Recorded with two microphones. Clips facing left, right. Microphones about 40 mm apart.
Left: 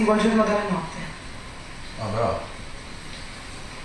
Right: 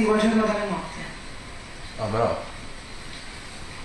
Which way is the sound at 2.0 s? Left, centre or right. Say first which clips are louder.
Right 2 dB; centre.